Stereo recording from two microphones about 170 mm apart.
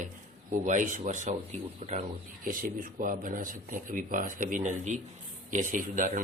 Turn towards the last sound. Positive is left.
turn(degrees=-50)  # may be behind; listen again after turning